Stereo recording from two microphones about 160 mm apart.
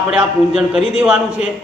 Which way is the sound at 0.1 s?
5° right (ahead or behind).